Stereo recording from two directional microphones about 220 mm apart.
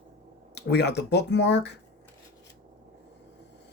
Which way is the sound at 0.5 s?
50° left (ahead or behind).